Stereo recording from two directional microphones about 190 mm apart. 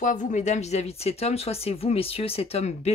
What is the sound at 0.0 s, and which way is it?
Speech, 40° left (ahead or behind).